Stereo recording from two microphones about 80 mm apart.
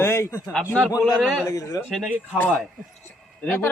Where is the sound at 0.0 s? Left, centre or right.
Left.